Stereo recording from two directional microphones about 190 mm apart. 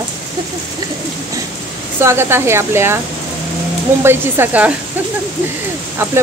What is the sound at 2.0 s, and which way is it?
Speech, 15° right (ahead or behind).